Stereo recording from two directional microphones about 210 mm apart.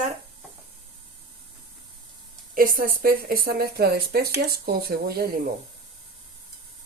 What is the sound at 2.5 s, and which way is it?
Speech, 40° right (ahead or behind).